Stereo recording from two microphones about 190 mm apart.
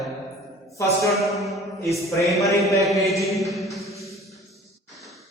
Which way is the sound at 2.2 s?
15° left (ahead or behind).